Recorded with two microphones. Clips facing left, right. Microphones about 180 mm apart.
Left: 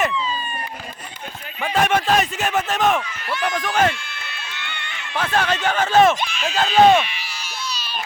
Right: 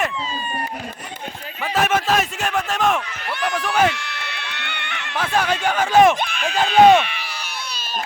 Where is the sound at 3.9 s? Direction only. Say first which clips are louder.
Right 4 dB; 70° right (ahead or behind).